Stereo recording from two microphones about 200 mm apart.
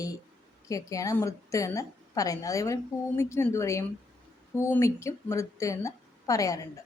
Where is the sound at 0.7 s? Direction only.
15° left (ahead or behind).